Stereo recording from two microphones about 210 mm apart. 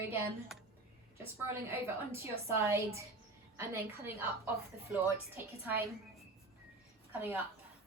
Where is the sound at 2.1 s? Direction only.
15° right (ahead or behind).